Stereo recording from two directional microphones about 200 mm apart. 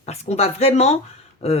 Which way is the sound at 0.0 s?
30° left (ahead or behind).